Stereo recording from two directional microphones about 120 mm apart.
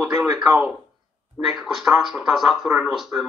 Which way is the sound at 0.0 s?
5° right (ahead or behind).